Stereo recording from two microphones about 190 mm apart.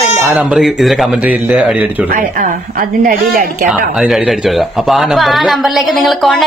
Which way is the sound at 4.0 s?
Centre (ahead or behind).